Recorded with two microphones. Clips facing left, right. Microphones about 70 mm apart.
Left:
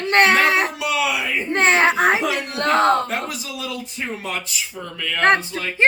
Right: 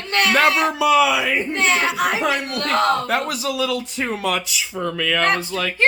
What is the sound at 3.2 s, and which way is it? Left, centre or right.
Speech, right.